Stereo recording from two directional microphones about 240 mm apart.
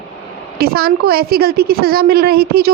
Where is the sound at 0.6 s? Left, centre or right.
Right.